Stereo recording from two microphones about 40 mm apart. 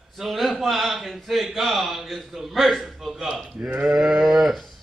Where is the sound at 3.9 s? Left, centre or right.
Centre.